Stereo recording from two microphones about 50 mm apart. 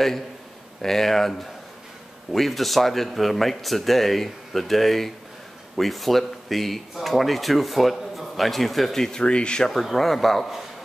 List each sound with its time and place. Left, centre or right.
0.8 s speech: centre
9.7 s speech: centre